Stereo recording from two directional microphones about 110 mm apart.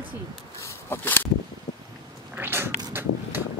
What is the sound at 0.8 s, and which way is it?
Speech, 20° left (ahead or behind).